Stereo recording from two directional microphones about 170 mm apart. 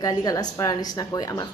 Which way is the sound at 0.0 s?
20° left (ahead or behind).